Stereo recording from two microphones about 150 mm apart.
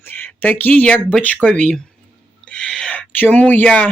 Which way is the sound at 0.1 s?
10° left (ahead or behind).